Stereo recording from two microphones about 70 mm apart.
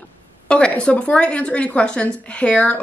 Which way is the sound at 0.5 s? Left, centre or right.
Centre.